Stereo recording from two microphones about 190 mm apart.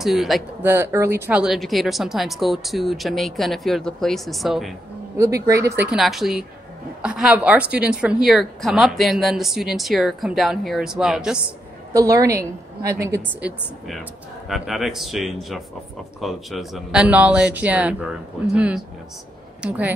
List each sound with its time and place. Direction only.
0.0 s speech: centre (ahead or behind)
5.1 s a woman's voice: 15° right (ahead or behind)
5.9 s speech: centre (ahead or behind)
11.9 s a woman's voice: 20° right (ahead or behind)